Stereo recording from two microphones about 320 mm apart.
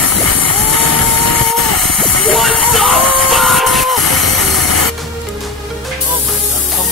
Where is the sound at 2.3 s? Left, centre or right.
Centre.